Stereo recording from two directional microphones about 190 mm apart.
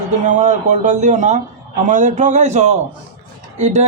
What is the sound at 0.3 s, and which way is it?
A man's voice, 40° right (ahead or behind).